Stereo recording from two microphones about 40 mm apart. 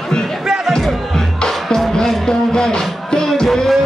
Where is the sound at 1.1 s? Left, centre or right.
Centre.